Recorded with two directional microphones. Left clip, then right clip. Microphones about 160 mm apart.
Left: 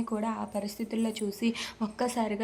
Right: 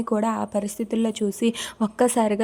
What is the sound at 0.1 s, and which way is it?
A woman's voice, 40° right (ahead or behind).